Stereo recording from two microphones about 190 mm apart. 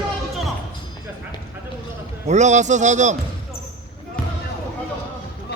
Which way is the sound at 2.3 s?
40° right (ahead or behind).